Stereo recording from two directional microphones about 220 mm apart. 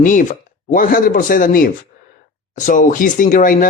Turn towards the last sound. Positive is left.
turn(degrees=35)  # may be behind; listen again after turning